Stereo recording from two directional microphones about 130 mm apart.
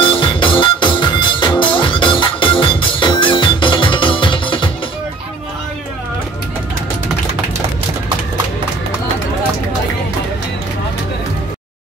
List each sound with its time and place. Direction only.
0.0 s music: 40° left (ahead or behind)